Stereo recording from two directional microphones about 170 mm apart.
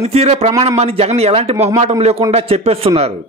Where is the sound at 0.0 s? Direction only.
40° right (ahead or behind).